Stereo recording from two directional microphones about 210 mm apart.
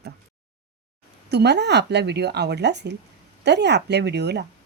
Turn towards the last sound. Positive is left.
turn(degrees=-55)  # may be behind; listen again after turning